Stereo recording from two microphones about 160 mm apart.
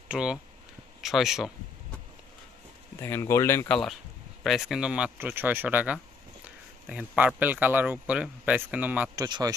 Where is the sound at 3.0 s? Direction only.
15° left (ahead or behind); by 9.1 s 10° right (ahead or behind).